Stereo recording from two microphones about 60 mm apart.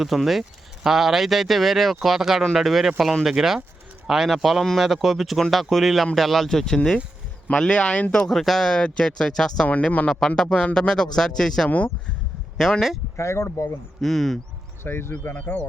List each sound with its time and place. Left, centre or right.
0.0 s speech: centre
8.3 s speech: centre
9.6 s speech: left
10.1 s speech: centre
11.7 s speech: left
12.5 s speech: centre
13.1 s speech: left
14.0 s speech: centre
14.8 s speech: left
15.2 s speech: left